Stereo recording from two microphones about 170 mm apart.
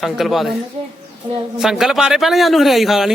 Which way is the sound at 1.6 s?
Centre (ahead or behind).